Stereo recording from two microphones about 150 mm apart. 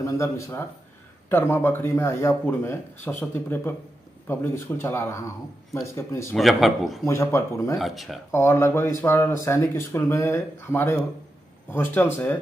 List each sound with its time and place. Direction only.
0.0 s speech: 20° left (ahead or behind)
4.3 s speech: 15° left (ahead or behind)
6.3 s a man's voice: centre (ahead or behind)
7.1 s speech: 20° left (ahead or behind)
7.8 s a man's voice: centre (ahead or behind)
8.3 s speech: 20° left (ahead or behind)